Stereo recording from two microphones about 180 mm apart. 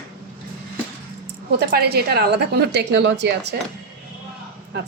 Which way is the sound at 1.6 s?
60° right (ahead or behind).